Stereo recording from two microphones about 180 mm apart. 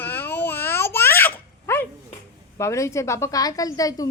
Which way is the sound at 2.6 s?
15° left (ahead or behind).